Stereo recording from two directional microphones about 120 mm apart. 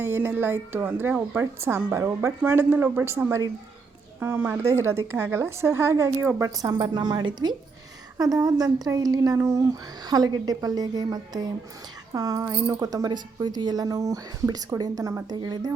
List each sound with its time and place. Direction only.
0.0 s speech: 15° right (ahead or behind)
1.6 s speech: 25° right (ahead or behind)